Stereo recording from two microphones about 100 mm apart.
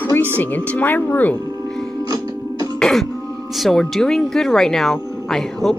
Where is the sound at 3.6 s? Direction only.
5° left (ahead or behind).